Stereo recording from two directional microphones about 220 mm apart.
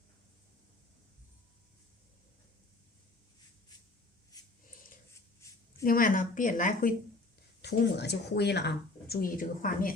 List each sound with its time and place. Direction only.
5.8 s a woman's voice: 40° left (ahead or behind)
7.6 s speech: 50° left (ahead or behind)